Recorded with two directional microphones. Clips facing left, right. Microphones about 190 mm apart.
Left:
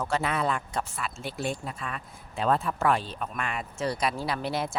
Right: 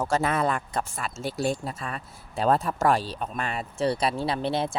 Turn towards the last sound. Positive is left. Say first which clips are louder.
# right 3 dB
turn(degrees=-30)  # may be behind; listen again after turning